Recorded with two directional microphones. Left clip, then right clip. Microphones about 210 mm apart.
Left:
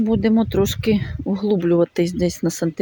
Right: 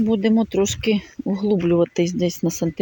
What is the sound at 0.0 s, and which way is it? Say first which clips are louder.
Speech: left 1 dB; 10° left (ahead or behind).